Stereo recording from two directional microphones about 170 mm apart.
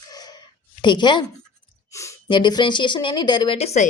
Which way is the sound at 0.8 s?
25° left (ahead or behind).